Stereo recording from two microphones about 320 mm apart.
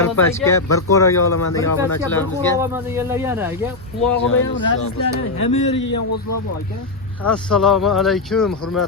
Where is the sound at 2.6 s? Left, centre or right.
Centre.